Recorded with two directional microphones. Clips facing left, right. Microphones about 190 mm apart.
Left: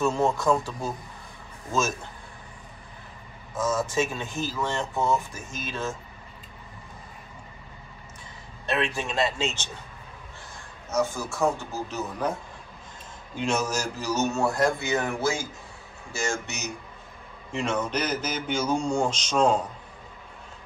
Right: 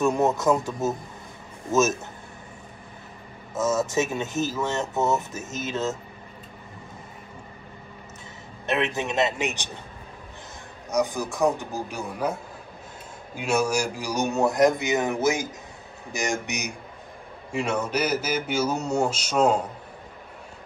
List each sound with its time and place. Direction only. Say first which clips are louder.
0.0 s speech: right 2 dB; 20° right (ahead or behind)
3.5 s speech: right 2 dB; 25° right (ahead or behind)
8.6 s speech: right 2 dB; 20° right (ahead or behind)
10.9 s speech: right 2 dB; 15° right (ahead or behind)